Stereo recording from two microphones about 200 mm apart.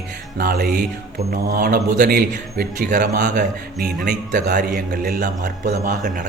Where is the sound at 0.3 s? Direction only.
50° right (ahead or behind).